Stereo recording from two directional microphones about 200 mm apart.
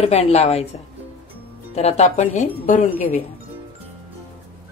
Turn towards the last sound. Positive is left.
turn(degrees=35)  # may be behind; listen again after turning